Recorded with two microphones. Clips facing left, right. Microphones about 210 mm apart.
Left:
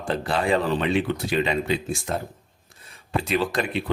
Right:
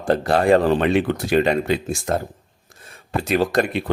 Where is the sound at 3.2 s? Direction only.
45° right (ahead or behind).